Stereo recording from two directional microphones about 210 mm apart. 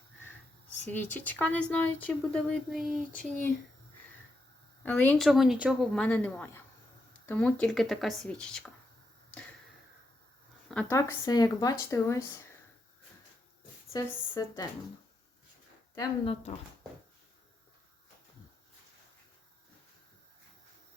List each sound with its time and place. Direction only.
0.9 s speech: 10° left (ahead or behind)
4.9 s speech: 10° left (ahead or behind)
10.7 s speech: 10° left (ahead or behind)
13.9 s speech: 15° left (ahead or behind)
16.0 s speech: 25° left (ahead or behind)